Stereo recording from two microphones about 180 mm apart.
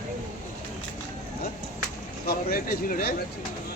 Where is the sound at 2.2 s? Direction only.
50° left (ahead or behind).